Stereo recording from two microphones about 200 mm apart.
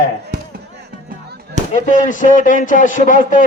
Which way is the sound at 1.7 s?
40° left (ahead or behind).